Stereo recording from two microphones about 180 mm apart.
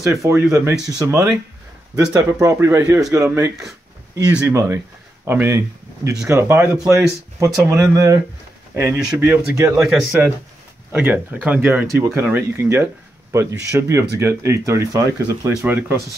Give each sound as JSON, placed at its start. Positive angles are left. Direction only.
{"t": 0.0, "sound": "speech", "side_deg": -15}